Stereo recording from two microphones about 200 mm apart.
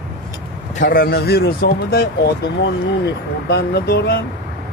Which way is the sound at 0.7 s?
45° left (ahead or behind).